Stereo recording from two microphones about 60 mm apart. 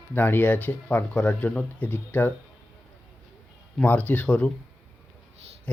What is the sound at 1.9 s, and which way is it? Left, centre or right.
Speech, left.